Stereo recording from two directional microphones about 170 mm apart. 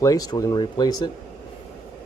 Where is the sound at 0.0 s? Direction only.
20° left (ahead or behind).